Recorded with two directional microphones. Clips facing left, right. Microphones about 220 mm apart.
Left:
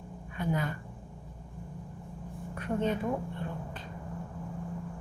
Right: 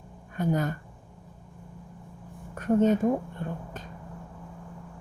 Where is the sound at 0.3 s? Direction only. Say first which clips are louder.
Right 5 dB; 45° right (ahead or behind).